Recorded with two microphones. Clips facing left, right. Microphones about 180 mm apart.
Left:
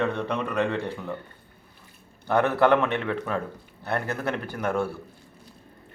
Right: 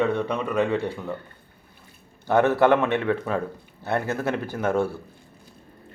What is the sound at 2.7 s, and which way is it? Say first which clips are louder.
A man's voice: right 2 dB; 20° right (ahead or behind).